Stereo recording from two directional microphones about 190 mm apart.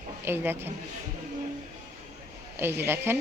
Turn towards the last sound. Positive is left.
turn(degrees=-10)  # may be behind; listen again after turning